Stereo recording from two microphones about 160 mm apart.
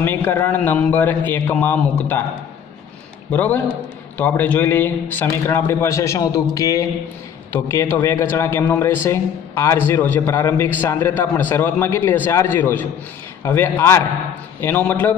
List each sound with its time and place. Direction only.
0.0 s a man's voice: 15° left (ahead or behind)
3.3 s a man's voice: 10° left (ahead or behind)